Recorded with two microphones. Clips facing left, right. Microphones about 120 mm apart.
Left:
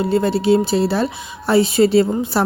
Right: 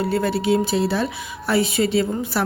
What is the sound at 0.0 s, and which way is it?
Speech, 25° left (ahead or behind).